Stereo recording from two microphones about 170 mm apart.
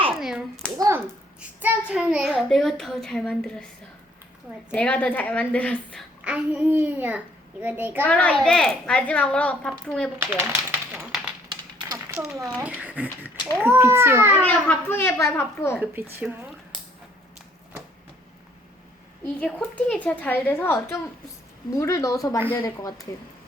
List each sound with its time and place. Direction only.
0.2 s a child's voice: 5° right (ahead or behind)
0.8 s a child's voice: 15° right (ahead or behind)
1.4 s a child's voice: 5° right (ahead or behind)
4.7 s a woman's voice: 10° left (ahead or behind)
6.2 s a child's voice: 10° right (ahead or behind)
8.0 s a woman's voice: 10° left (ahead or behind)
10.2 s typewriter: 15° right (ahead or behind)
11.9 s a sound: 20° right (ahead or behind)
12.3 s a child's voice: centre (ahead or behind)
14.4 s a woman's voice: 10° left (ahead or behind)
16.2 s a child's voice: centre (ahead or behind)
19.4 s a woman's voice: 5° left (ahead or behind)